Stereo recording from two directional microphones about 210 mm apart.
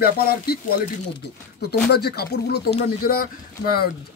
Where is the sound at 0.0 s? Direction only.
45° left (ahead or behind).